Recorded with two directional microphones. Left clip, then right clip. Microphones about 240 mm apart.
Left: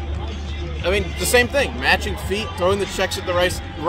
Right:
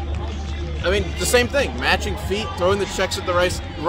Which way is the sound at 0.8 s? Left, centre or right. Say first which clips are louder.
Even; centre.